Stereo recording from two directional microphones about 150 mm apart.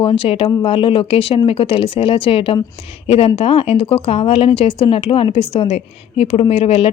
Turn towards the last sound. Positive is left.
turn(degrees=40)  # may be behind; listen again after turning